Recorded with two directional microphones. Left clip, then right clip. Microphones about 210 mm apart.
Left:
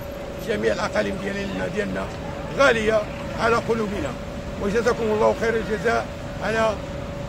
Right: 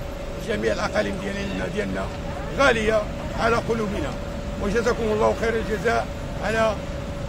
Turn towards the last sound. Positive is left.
turn(degrees=0)  # may be behind; listen again after turning